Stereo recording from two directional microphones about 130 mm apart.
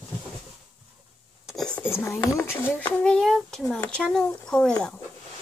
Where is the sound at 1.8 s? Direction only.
15° left (ahead or behind).